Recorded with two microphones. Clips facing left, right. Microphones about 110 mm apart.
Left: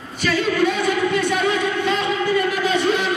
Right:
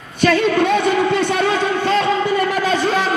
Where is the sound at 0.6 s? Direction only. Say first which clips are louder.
Right 4 dB; 25° right (ahead or behind).